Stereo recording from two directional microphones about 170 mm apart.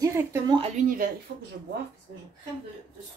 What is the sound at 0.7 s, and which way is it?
Speech, 55° right (ahead or behind).